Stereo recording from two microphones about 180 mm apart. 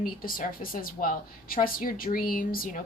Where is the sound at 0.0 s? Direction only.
55° left (ahead or behind).